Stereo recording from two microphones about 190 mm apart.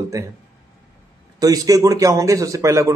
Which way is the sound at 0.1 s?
15° right (ahead or behind).